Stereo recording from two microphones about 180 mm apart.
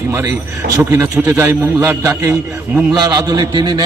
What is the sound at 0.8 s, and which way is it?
A man's voice, 15° right (ahead or behind).